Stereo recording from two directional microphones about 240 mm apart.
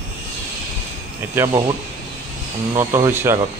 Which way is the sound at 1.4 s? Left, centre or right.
Centre.